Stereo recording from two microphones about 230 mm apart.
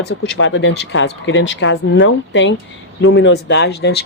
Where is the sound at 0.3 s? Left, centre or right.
Left.